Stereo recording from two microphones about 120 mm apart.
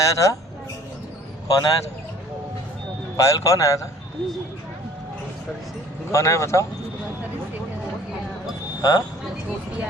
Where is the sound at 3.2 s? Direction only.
25° left (ahead or behind).